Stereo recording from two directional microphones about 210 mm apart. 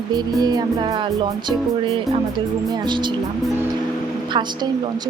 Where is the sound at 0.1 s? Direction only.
20° right (ahead or behind).